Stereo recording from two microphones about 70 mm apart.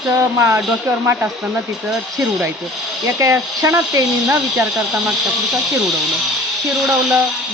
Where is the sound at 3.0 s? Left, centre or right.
Right.